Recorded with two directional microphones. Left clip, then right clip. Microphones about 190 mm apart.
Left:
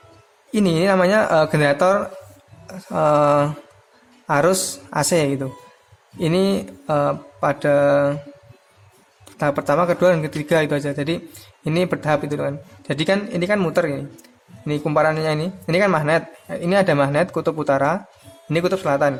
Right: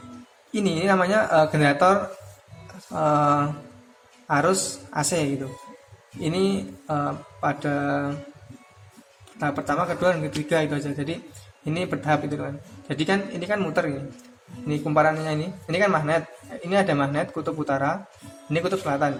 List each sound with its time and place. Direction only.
0.5 s a man's voice: 35° left (ahead or behind)
9.4 s a man's voice: 35° left (ahead or behind)